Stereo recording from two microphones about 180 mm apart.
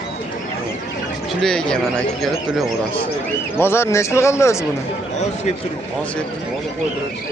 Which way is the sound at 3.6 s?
15° left (ahead or behind).